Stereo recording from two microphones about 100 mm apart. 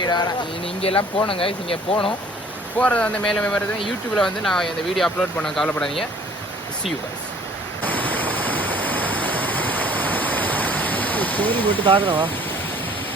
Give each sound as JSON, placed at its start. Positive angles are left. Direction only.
{"t": 0.0, "sound": "speech", "side_deg": 45}
{"t": 0.8, "sound": "speech", "side_deg": 75}
{"t": 2.7, "sound": "speech", "side_deg": 15}
{"t": 7.9, "sound": "waterfall", "side_deg": 15}
{"t": 11.9, "sound": "speech", "side_deg": -60}